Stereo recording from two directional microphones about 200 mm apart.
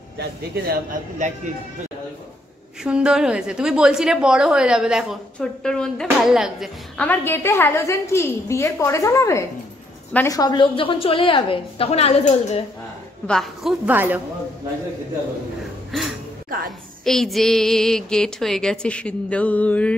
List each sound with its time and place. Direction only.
0.2 s a man's voice: 45° right (ahead or behind)
2.8 s a woman's voice: 5° right (ahead or behind); by 12.6 s 35° left (ahead or behind)
13.3 s a woman's voice: centre (ahead or behind)
15.9 s a sound: centre (ahead or behind)
17.0 s a woman's voice: centre (ahead or behind)